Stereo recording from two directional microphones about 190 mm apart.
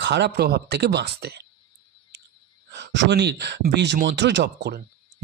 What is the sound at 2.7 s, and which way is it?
Speech, 65° right (ahead or behind).